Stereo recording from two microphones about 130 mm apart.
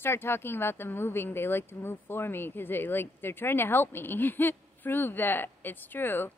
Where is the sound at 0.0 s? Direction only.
20° left (ahead or behind).